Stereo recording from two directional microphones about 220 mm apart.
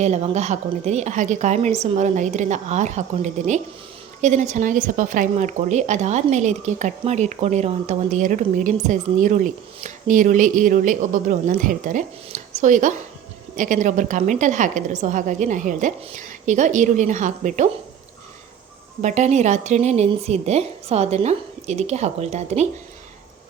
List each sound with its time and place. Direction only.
0.0 s speech: 30° right (ahead or behind)
19.0 s speech: 30° right (ahead or behind)